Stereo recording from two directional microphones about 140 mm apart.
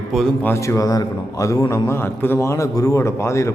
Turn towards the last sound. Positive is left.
turn(degrees=20)  # may be behind; listen again after turning